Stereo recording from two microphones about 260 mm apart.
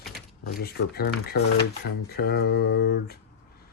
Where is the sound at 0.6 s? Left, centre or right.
Left.